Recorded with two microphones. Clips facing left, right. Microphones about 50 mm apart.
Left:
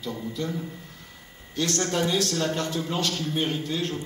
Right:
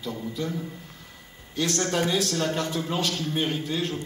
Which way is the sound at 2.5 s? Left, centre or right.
Right.